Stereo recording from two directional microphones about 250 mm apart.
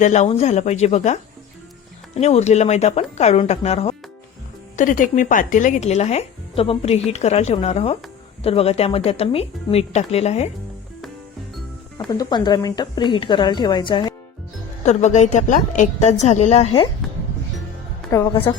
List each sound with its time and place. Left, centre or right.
0.0 s speech: left
11.9 s a woman's voice: centre
18.1 s a woman's voice: centre